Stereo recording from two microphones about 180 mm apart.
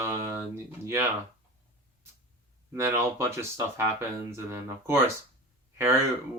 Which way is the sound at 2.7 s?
15° right (ahead or behind).